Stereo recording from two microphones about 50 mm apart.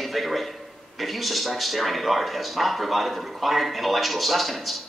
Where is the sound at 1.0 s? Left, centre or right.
Centre.